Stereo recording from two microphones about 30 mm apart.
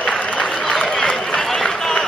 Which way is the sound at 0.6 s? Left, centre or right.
Left.